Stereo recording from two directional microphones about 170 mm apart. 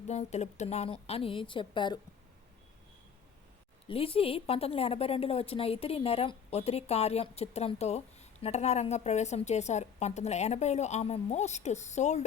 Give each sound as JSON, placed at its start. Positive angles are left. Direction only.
{"t": 0.1, "sound": "a woman's voice", "side_deg": 40}
{"t": 3.8, "sound": "a woman's voice", "side_deg": 35}